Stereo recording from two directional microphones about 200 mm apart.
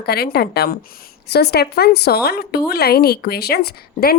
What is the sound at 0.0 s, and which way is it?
A woman's voice, 50° left (ahead or behind).